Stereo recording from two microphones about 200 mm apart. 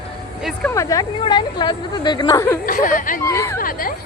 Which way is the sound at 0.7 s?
15° left (ahead or behind).